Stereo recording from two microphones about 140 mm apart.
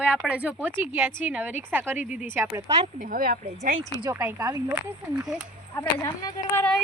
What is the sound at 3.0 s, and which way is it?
Speech, 90° right.